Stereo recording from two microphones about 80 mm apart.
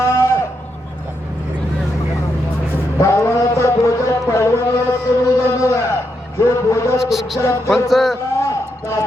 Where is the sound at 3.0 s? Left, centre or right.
Left.